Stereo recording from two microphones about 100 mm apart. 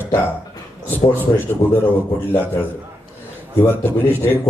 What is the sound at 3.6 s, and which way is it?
Speech, 25° left (ahead or behind).